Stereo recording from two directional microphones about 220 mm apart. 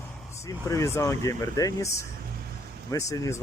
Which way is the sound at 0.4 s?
15° left (ahead or behind).